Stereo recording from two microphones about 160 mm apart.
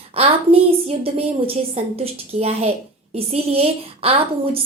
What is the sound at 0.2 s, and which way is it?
A woman's voice, 35° right (ahead or behind).